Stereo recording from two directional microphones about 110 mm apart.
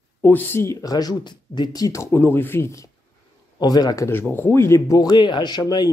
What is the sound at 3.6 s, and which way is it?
Speech, 35° left (ahead or behind).